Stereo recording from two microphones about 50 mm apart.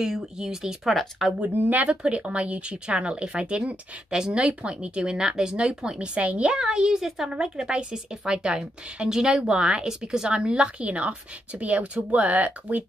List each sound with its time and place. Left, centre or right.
0.0 s speech: centre
1.4 s speech: right
1.9 s a woman's voice: right
6.1 s a woman's voice: right
6.6 s a woman's voice: centre; by 12.8 s right